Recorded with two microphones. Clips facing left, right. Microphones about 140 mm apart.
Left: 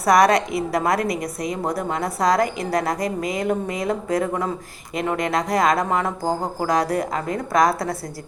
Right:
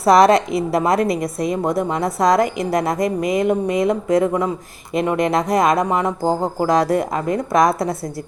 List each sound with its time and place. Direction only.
0.0 s a woman's voice: 25° right (ahead or behind)